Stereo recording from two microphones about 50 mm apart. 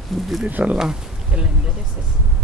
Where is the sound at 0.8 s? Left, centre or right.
Centre.